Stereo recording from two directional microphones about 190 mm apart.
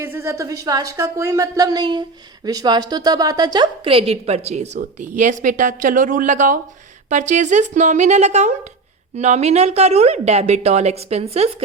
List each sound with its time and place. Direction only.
0.0 s a woman's voice: 10° right (ahead or behind); by 11.5 s 30° right (ahead or behind)